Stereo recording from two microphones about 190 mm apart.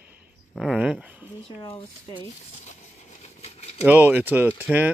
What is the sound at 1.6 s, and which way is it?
Speech, 25° left (ahead or behind).